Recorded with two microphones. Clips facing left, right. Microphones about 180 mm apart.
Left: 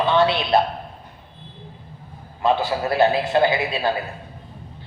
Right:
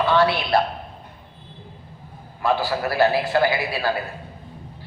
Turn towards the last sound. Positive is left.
turn(degrees=20)  # may be behind; listen again after turning